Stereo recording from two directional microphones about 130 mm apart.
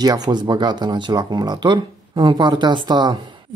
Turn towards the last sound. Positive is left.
turn(degrees=-35)  # may be behind; listen again after turning